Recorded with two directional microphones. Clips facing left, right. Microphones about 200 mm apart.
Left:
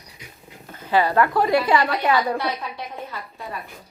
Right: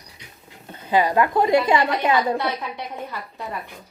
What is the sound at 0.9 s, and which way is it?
A woman's voice, 15° right (ahead or behind).